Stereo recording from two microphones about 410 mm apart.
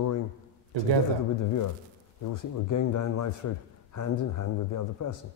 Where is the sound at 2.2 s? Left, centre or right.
Left.